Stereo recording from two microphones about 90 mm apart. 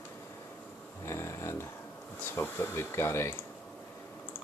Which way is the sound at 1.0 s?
30° left (ahead or behind).